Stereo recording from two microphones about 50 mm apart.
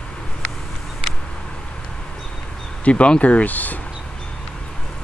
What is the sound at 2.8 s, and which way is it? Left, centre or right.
Speech, left.